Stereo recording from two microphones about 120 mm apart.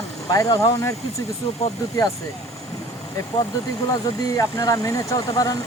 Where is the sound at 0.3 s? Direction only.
25° left (ahead or behind).